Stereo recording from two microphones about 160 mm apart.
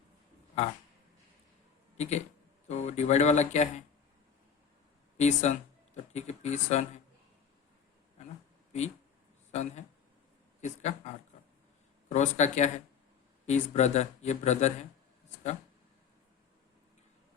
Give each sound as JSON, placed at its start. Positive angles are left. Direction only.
{"t": 2.0, "sound": "speech", "side_deg": 45}
{"t": 5.1, "sound": "speech", "side_deg": 45}
{"t": 9.5, "sound": "speech", "side_deg": 45}